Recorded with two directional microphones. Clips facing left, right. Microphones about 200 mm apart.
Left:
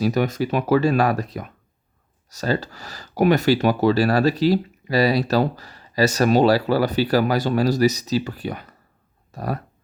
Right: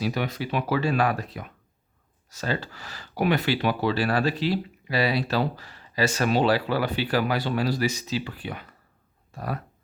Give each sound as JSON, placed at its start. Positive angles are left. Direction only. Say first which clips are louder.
{"t": 0.0, "sound": "speech", "louder": "left 7 dB", "side_deg": 45}